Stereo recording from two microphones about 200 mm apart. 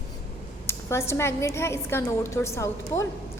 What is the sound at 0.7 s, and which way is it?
A woman's voice, 15° left (ahead or behind).